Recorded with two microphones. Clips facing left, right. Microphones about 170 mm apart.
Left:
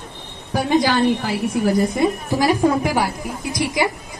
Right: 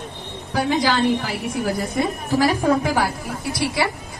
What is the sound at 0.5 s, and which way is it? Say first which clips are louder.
Speech: left 2 dB; 20° left (ahead or behind).